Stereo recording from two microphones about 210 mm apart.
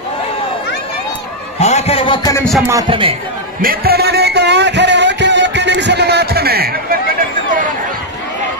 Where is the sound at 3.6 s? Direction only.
45° right (ahead or behind).